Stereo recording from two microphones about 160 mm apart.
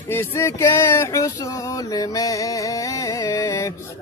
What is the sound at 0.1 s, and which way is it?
Music, 15° left (ahead or behind).